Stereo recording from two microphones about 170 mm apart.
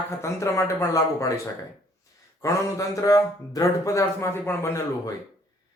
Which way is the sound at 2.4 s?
20° left (ahead or behind).